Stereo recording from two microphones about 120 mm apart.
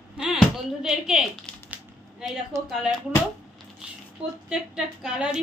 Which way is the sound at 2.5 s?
25° right (ahead or behind).